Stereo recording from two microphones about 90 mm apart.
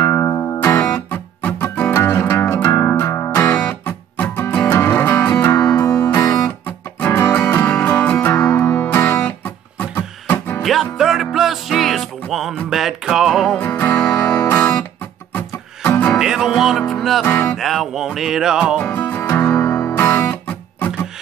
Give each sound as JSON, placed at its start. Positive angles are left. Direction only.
{"t": 0.0, "sound": "music", "side_deg": 30}
{"t": 0.7, "sound": "music", "side_deg": 20}
{"t": 10.6, "sound": "music", "side_deg": 0}
{"t": 13.6, "sound": "music", "side_deg": 20}
{"t": 14.1, "sound": "music", "side_deg": 35}
{"t": 14.6, "sound": "music", "side_deg": 15}
{"t": 16.2, "sound": "music", "side_deg": -5}
{"t": 17.2, "sound": "music", "side_deg": 20}
{"t": 17.6, "sound": "music", "side_deg": 0}
{"t": 18.9, "sound": "music", "side_deg": 25}